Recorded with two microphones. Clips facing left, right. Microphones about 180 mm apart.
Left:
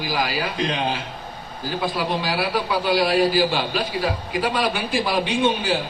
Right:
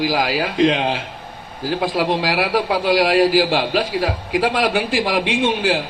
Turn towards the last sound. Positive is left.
turn(degrees=-90)